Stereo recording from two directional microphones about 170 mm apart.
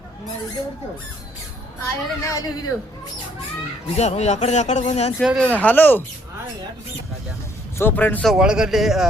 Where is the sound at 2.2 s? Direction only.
20° left (ahead or behind).